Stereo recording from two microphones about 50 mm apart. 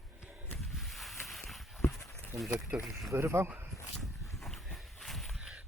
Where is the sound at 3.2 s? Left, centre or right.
Right.